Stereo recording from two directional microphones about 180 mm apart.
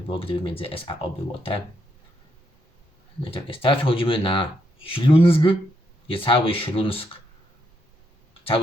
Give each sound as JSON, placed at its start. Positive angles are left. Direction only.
{"t": 0.2, "sound": "speech", "side_deg": 30}
{"t": 3.2, "sound": "speech", "side_deg": 30}
{"t": 8.3, "sound": "a sound", "side_deg": 30}